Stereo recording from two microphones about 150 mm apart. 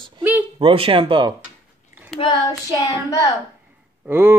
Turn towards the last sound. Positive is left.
turn(degrees=-15)  # may be behind; listen again after turning